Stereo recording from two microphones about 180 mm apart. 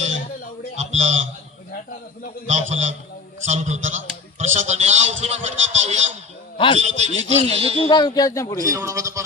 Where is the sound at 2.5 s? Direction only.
40° right (ahead or behind).